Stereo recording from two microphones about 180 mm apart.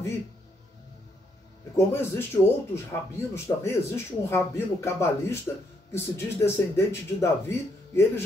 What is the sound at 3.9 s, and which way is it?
Speech, 15° left (ahead or behind).